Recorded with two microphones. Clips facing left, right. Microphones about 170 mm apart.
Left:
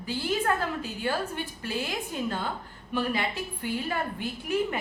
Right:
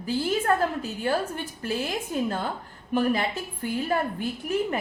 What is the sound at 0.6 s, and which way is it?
A woman's voice, 40° right (ahead or behind).